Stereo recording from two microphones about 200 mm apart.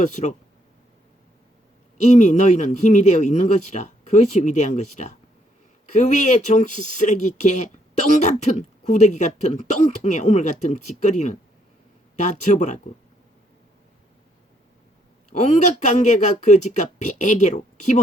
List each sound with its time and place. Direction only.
0.0 s speech: 35° left (ahead or behind)
2.0 s speech: 35° left (ahead or behind)
15.3 s speech: 35° left (ahead or behind)